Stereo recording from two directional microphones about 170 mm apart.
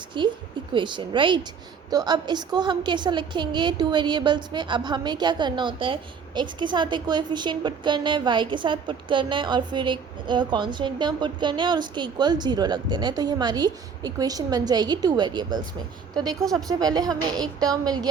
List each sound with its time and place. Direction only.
0.1 s a woman's voice: 30° right (ahead or behind)
16.3 s speech: centre (ahead or behind)
16.6 s a woman's voice: 25° right (ahead or behind)